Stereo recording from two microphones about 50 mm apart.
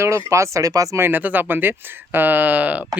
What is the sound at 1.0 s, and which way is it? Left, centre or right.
Speech, right.